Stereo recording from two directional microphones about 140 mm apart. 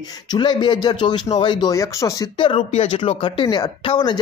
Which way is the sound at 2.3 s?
35° left (ahead or behind).